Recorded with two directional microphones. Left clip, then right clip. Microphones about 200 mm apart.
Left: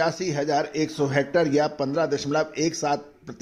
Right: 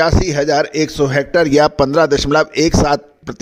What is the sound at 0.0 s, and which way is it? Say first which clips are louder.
A man's voice: right 10 dB; 50° right (ahead or behind).